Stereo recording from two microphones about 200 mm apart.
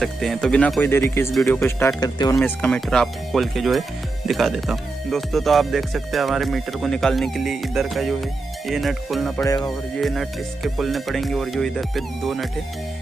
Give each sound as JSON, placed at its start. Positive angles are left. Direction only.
{"t": 0.0, "sound": "speech", "side_deg": 0}
{"t": 1.3, "sound": "speech", "side_deg": 0}
{"t": 9.4, "sound": "speech", "side_deg": 15}
{"t": 9.7, "sound": "speech", "side_deg": 0}